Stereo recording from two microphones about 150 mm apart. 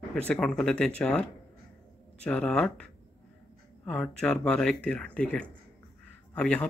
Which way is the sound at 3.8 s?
5° left (ahead or behind).